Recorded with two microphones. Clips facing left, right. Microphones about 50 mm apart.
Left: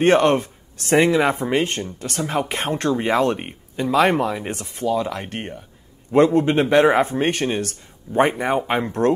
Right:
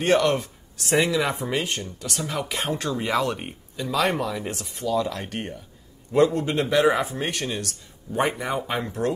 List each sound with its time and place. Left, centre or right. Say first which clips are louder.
0.0 s speech: left 5 dB; left